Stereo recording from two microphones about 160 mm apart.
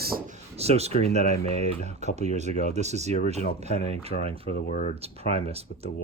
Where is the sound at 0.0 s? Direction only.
70° right (ahead or behind).